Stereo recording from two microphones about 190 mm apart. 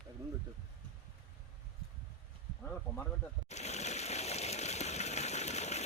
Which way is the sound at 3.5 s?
35° left (ahead or behind).